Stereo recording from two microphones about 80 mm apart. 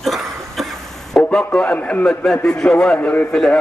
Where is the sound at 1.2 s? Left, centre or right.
Centre.